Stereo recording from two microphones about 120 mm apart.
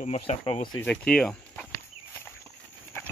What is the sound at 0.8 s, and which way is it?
Speech, 10° left (ahead or behind).